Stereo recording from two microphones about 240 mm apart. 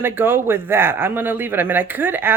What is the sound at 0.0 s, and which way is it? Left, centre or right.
Speech, centre.